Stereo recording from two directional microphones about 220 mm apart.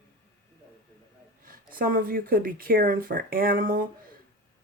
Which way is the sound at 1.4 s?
40° right (ahead or behind).